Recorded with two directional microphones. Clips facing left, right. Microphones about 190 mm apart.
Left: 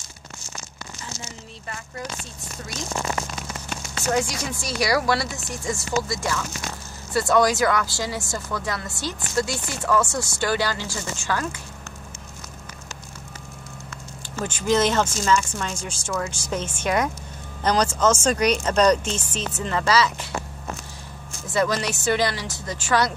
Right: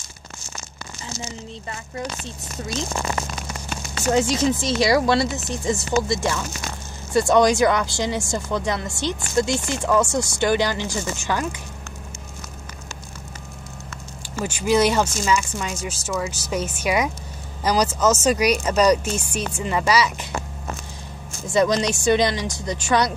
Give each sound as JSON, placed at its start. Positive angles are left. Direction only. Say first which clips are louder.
{"t": 4.1, "sound": "speech", "louder": "right 6 dB", "side_deg": -25}
{"t": 14.4, "sound": "speech", "louder": "right 2 dB", "side_deg": -10}
{"t": 21.5, "sound": "speech", "louder": "right 4 dB", "side_deg": -20}